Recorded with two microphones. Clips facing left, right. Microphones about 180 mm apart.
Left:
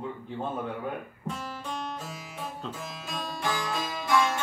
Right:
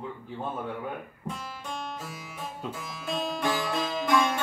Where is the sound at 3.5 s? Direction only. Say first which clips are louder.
Right 3 dB; 25° right (ahead or behind).